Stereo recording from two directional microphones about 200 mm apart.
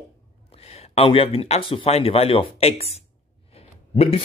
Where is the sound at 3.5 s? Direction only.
30° left (ahead or behind).